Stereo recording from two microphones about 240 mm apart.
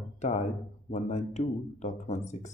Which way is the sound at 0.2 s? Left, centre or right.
Left.